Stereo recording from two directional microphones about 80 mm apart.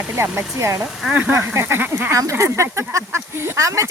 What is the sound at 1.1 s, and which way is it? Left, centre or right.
Speech, centre.